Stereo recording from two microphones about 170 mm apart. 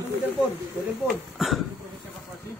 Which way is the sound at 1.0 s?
Centre (ahead or behind).